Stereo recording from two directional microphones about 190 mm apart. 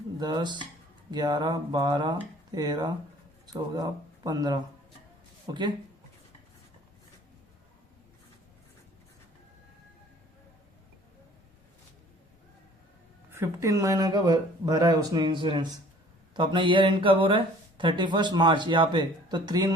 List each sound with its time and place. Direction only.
0.2 s speech: 25° right (ahead or behind)
13.3 s speech: 15° right (ahead or behind)